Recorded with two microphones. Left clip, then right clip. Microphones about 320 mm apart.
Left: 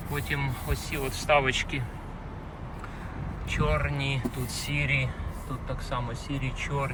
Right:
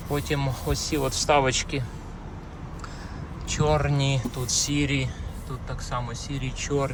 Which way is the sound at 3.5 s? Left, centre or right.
Centre.